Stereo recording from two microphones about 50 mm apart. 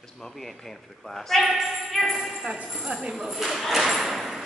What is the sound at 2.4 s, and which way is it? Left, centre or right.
Speech, centre.